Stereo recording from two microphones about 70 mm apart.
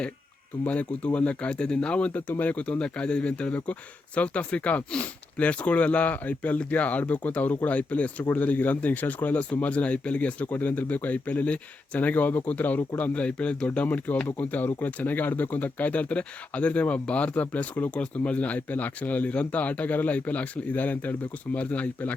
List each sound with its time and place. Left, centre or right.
0.6 s speech: centre